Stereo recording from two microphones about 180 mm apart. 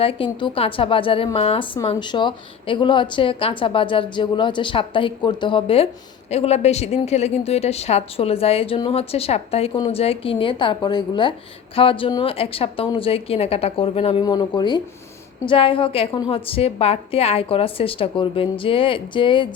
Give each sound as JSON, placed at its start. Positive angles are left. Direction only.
{"t": 0.0, "sound": "a woman's voice", "side_deg": 30}